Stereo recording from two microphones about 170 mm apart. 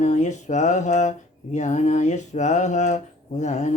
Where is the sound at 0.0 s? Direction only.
45° left (ahead or behind).